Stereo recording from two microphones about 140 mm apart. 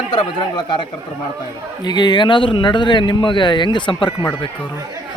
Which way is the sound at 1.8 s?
30° left (ahead or behind).